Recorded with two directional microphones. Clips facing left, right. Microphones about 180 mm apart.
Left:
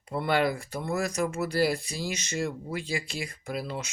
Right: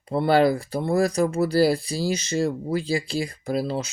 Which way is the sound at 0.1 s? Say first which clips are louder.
Right 7 dB; 35° right (ahead or behind).